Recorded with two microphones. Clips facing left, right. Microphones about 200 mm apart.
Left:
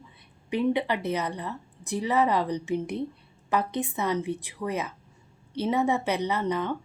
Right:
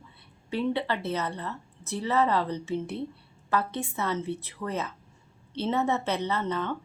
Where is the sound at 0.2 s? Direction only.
15° left (ahead or behind).